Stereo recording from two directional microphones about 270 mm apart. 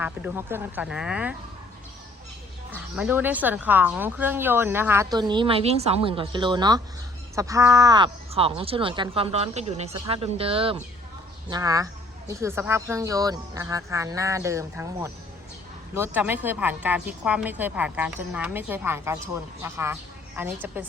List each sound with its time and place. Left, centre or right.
0.0 s speech: centre
2.7 s a woman's voice: centre